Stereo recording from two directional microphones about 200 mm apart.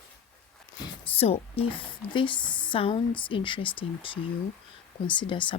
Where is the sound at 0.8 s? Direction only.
30° left (ahead or behind).